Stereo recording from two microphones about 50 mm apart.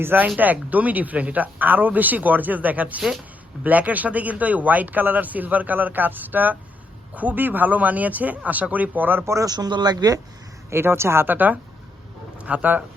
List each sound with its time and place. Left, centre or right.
0.0 s speech: right
9.2 s a man's voice: right
10.7 s speech: right
11.3 s speech: right
12.4 s speech: right